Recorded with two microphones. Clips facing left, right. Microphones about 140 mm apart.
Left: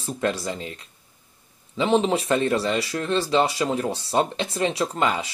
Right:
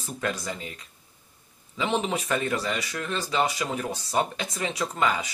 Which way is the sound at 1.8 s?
30° left (ahead or behind).